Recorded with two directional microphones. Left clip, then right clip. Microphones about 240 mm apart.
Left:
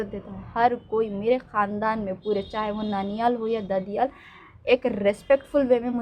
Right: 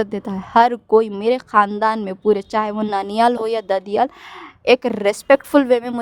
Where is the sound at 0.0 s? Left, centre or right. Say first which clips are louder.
Right 10 dB; right.